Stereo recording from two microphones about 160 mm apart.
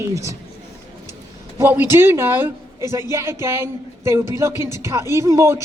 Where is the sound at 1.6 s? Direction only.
15° right (ahead or behind).